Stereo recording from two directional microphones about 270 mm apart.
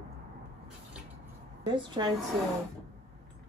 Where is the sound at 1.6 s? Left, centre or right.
Centre.